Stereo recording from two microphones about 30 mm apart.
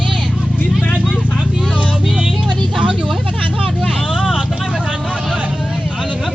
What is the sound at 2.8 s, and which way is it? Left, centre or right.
Vehicle, right.